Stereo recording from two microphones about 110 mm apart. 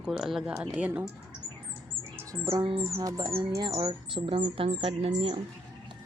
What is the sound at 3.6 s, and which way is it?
Speech, 45° right (ahead or behind).